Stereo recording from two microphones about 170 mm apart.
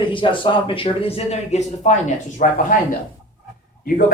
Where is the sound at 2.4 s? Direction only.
50° left (ahead or behind).